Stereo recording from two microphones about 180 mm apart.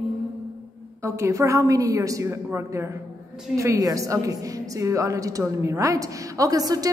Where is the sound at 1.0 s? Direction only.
15° right (ahead or behind).